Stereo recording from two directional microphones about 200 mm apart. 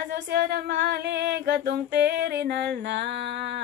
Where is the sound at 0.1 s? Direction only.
55° right (ahead or behind).